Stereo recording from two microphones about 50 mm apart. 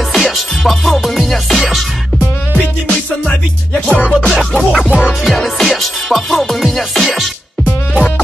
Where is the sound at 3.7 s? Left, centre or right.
Left.